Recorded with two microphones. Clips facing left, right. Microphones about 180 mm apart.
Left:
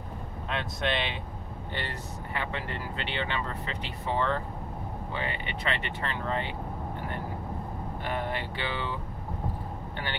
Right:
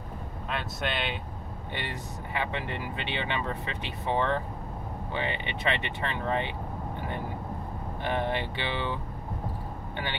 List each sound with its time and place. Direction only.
0.5 s speech: 5° right (ahead or behind)
1.8 s speech: 15° right (ahead or behind)
8.0 s speech: 20° right (ahead or behind)